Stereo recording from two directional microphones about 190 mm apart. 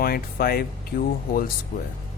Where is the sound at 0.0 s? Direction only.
50° left (ahead or behind).